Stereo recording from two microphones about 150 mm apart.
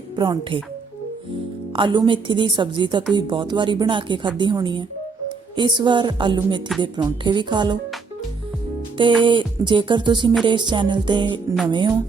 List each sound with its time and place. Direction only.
0.2 s speech: 30° right (ahead or behind)
1.7 s a woman's voice: 35° right (ahead or behind)
9.2 s a woman's voice: 35° right (ahead or behind)